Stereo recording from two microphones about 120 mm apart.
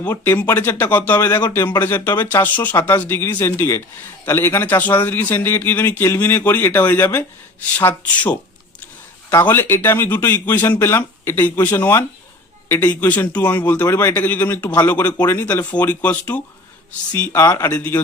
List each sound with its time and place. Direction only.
0.1 s a man's voice: 20° left (ahead or behind)
9.5 s a man's voice: 20° left (ahead or behind)